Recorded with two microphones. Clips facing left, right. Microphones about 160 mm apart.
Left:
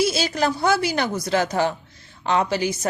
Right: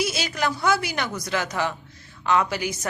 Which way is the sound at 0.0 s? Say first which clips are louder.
Left 5 dB; 30° left (ahead or behind).